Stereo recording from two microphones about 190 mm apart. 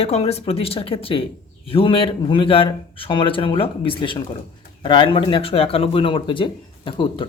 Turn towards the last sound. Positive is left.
turn(degrees=25)  # may be behind; listen again after turning